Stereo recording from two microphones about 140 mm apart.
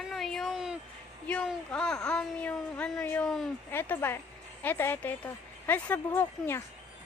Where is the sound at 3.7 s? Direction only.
15° left (ahead or behind).